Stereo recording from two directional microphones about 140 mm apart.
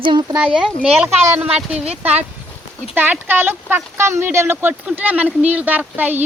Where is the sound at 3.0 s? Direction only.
15° right (ahead or behind).